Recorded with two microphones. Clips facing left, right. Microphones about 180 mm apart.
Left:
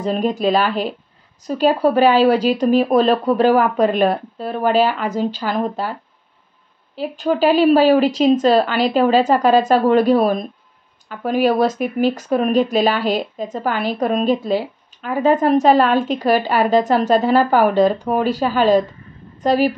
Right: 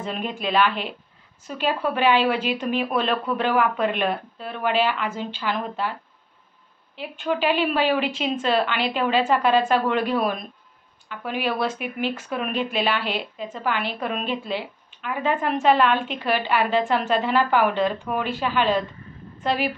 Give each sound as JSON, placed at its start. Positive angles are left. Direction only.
{"t": 0.0, "sound": "speech", "side_deg": 40}
{"t": 7.0, "sound": "speech", "side_deg": 40}